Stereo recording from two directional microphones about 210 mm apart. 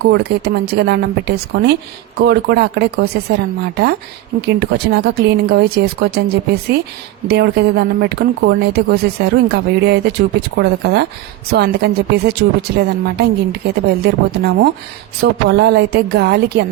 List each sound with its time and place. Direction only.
0.0 s speech: 55° right (ahead or behind)
4.4 s speech: 50° right (ahead or behind)